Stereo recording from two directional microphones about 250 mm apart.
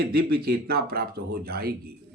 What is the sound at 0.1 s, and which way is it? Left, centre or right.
Speech, right.